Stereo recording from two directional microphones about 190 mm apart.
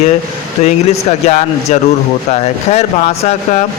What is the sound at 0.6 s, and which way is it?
Speech, 35° left (ahead or behind).